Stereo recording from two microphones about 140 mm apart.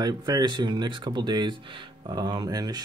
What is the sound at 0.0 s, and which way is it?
Speech, 30° right (ahead or behind).